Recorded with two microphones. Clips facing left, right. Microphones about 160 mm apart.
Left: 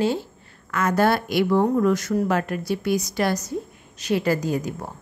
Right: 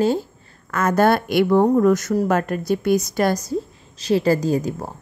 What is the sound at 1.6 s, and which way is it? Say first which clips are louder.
A woman's voice: right 4 dB; 45° right (ahead or behind).